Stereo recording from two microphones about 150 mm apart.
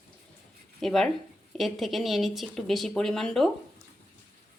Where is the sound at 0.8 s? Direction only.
Centre (ahead or behind).